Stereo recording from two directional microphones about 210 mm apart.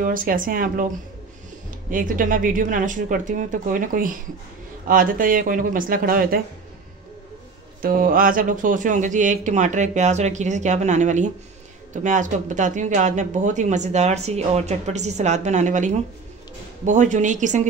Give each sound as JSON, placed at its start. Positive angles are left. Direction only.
{"t": 0.0, "sound": "speech", "side_deg": -40}
{"t": 1.9, "sound": "speech", "side_deg": -40}
{"t": 7.8, "sound": "speech", "side_deg": -45}